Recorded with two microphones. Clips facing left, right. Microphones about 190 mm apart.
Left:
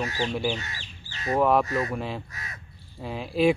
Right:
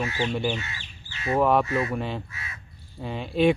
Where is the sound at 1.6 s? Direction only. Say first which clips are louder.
Right 1 dB; 40° left (ahead or behind).